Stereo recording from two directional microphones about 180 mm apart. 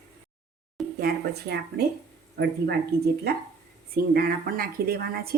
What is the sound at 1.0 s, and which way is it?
A woman's voice, 60° right (ahead or behind).